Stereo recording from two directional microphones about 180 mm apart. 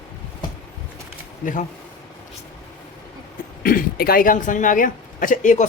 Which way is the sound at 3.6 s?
55° left (ahead or behind).